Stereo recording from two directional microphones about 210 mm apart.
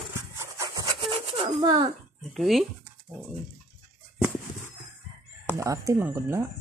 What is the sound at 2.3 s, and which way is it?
Speech, centre (ahead or behind).